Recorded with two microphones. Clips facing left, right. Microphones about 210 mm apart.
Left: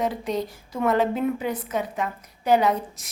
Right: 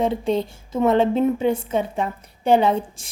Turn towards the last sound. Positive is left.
turn(degrees=-30)  # may be behind; listen again after turning